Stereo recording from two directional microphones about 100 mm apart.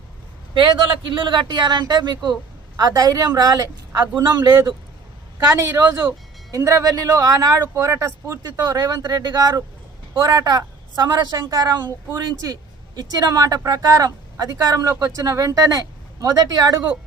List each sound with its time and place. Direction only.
0.5 s a man's voice: 50° right (ahead or behind)
5.5 s speech: 30° right (ahead or behind)